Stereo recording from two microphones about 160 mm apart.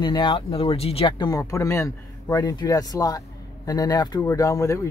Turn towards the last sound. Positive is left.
turn(degrees=20)  # may be behind; listen again after turning